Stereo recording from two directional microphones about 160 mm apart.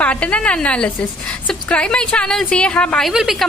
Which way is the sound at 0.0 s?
10° left (ahead or behind).